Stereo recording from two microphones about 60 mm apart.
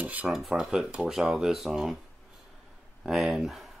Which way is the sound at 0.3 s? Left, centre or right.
Centre.